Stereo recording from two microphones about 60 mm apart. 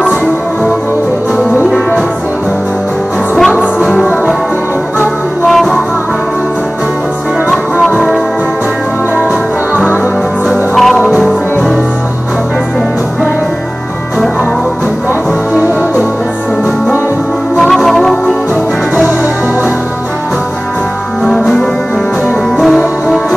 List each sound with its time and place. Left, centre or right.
3.9 s music: centre
5.5 s music: centre
7.9 s music: centre
10.8 s music: centre
17.6 s music: centre
21.3 s music: centre